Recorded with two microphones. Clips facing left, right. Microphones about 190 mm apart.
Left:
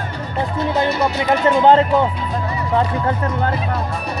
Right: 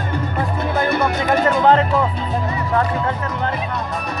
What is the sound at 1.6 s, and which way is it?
Speech, 30° left (ahead or behind).